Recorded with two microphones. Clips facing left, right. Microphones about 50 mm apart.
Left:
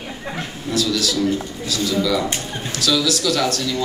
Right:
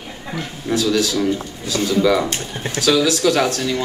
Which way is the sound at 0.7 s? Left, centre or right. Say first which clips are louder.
Right 3 dB; right.